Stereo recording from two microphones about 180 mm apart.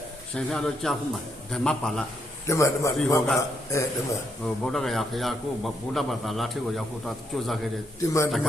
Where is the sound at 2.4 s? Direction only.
15° left (ahead or behind).